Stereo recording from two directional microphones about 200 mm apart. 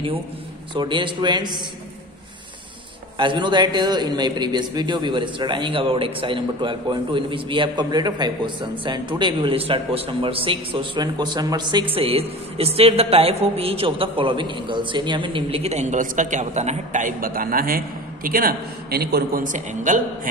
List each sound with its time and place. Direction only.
0.7 s a man's voice: 25° right (ahead or behind)
3.2 s a man's voice: 25° right (ahead or behind); by 20.0 s 40° right (ahead or behind)